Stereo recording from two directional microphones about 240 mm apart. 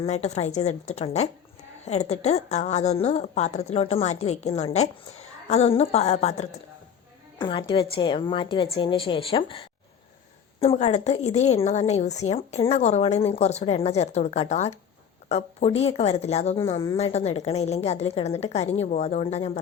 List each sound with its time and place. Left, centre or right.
0.0 s a woman's voice: left